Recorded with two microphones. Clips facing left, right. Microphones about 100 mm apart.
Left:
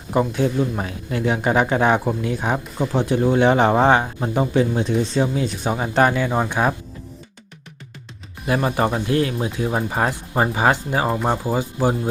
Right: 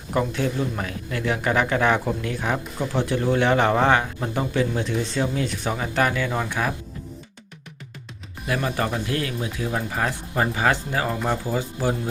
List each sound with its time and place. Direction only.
0.1 s speech: 20° left (ahead or behind)
8.4 s speech: 30° left (ahead or behind)